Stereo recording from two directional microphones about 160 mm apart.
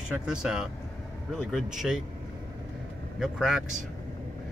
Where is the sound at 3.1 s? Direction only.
5° right (ahead or behind).